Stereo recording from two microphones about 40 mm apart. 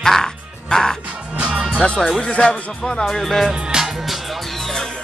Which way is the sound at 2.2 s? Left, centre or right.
Left.